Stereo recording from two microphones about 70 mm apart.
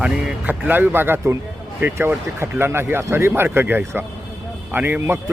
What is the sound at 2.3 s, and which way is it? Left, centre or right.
Speech, right.